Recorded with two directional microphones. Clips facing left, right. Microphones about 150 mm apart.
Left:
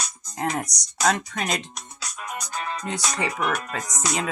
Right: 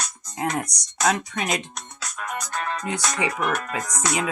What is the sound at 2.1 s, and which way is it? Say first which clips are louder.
Music: right 3 dB; 20° left (ahead or behind).